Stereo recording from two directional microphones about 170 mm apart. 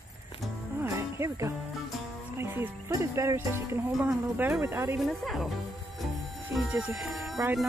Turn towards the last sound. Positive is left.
turn(degrees=-5)  # may be behind; listen again after turning